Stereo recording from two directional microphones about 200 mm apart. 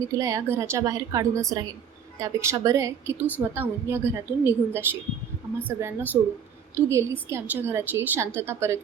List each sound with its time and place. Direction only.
0.2 s speech: 15° right (ahead or behind)